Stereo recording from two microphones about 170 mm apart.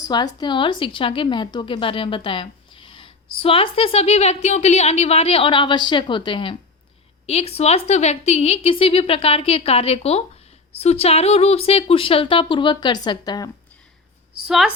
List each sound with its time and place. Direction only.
0.0 s a woman's voice: 25° left (ahead or behind)
14.4 s a woman's voice: 5° right (ahead or behind)